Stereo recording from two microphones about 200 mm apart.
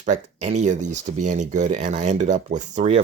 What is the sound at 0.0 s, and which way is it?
Speech, 35° right (ahead or behind).